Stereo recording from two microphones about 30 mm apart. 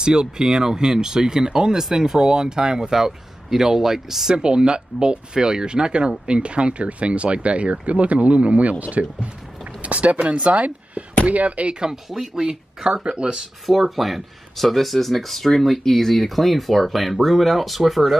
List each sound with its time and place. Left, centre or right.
0.0 s speech: right
1.8 s speech: centre
4.3 s speech: right
11.9 s speech: centre; by 13.4 s right
13.7 s speech: centre